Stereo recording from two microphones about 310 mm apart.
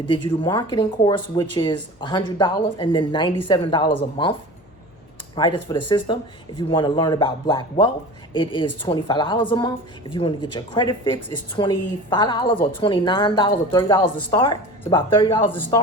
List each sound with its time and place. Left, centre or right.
0.1 s speech: centre